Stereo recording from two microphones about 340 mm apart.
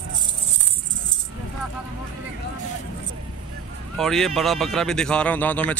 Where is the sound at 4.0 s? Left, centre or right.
Centre.